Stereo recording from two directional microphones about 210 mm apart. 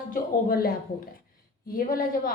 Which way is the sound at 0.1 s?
45° left (ahead or behind).